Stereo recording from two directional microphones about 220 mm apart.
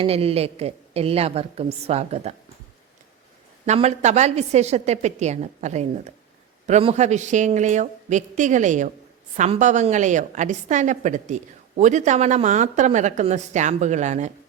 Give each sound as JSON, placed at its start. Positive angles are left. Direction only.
{"t": 0.0, "sound": "a woman's voice", "side_deg": -25}
{"t": 3.7, "sound": "a woman's voice", "side_deg": -30}